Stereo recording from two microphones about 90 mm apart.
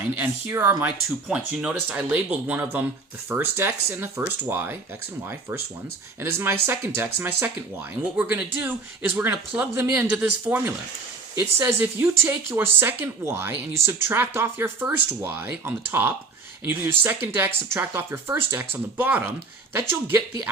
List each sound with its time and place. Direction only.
0.2 s speech: 25° right (ahead or behind)
6.2 s speech: 25° right (ahead or behind)
9.7 s speech: 35° right (ahead or behind)
10.0 s speech: 20° right (ahead or behind)